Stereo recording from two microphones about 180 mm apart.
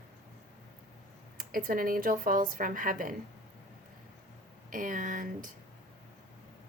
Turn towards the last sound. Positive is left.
turn(degrees=-45)  # may be behind; listen again after turning